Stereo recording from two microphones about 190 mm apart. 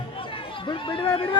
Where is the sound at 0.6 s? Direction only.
25° left (ahead or behind).